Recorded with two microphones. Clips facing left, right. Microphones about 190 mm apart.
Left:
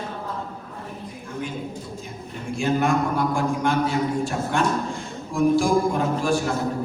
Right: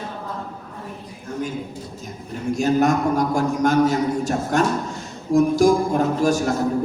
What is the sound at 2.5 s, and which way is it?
Music, 40° right (ahead or behind).